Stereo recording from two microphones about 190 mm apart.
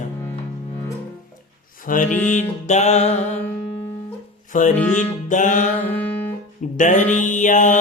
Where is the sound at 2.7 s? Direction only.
35° left (ahead or behind).